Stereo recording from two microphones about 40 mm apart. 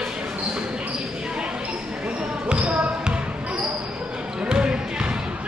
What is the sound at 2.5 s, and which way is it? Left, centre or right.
Basketball bounce, right.